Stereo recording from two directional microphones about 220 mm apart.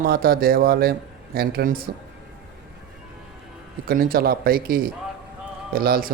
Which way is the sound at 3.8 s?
40° right (ahead or behind).